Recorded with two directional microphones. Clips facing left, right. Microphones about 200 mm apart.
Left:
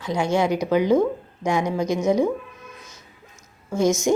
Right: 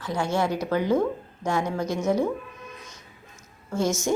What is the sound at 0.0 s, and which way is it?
A woman's voice, 15° left (ahead or behind).